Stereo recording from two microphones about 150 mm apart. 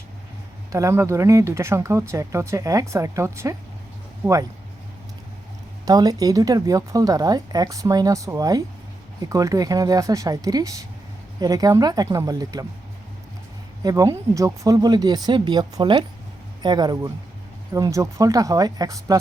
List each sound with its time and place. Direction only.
0.7 s speech: 20° right (ahead or behind)
5.8 s speech: 25° right (ahead or behind)
13.8 s speech: 20° right (ahead or behind)